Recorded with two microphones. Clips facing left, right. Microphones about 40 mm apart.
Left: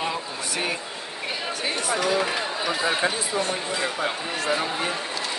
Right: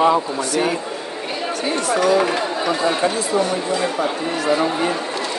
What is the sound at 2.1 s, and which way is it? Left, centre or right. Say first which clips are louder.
Speech: right 7 dB; centre.